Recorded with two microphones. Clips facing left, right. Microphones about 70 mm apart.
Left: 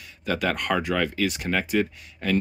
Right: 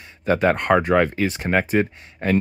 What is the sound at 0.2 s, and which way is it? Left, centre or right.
Speech, right.